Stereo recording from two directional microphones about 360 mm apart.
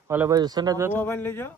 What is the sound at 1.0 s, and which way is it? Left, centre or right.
Speech, centre.